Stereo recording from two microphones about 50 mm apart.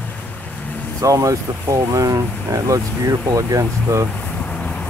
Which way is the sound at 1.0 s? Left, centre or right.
Right.